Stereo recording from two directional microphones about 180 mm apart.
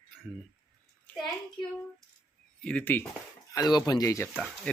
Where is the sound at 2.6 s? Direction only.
10° left (ahead or behind).